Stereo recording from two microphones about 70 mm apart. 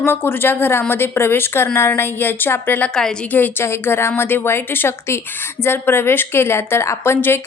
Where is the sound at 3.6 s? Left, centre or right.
Left.